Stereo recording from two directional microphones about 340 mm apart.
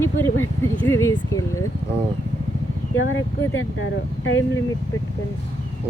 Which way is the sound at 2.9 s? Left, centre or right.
Left.